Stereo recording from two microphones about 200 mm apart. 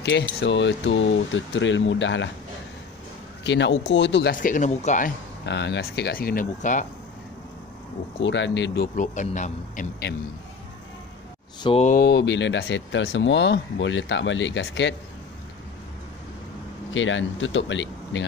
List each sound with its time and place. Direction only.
0.0 s speech: 60° left (ahead or behind)
3.4 s speech: 65° left (ahead or behind); by 5.1 s 40° left (ahead or behind)
5.4 s speech: 60° left (ahead or behind); by 6.9 s 40° left (ahead or behind)
8.2 s speech: 65° left (ahead or behind); by 9.8 s 35° left (ahead or behind)
11.6 s speech: 30° left (ahead or behind)
11.9 s speech: 55° left (ahead or behind)
16.9 s speech: 70° left (ahead or behind)